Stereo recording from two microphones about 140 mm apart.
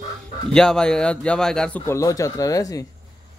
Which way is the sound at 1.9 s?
25° left (ahead or behind).